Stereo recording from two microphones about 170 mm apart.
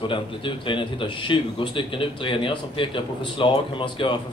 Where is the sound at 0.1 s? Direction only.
30° left (ahead or behind).